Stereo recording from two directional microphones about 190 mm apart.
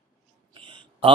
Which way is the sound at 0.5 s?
25° right (ahead or behind).